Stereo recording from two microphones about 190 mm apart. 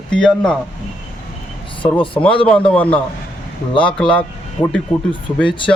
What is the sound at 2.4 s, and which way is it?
Speech, 5° left (ahead or behind).